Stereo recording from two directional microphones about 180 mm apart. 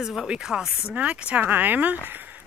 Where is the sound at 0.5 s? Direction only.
5° right (ahead or behind).